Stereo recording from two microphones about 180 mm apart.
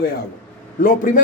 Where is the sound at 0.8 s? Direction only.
50° left (ahead or behind).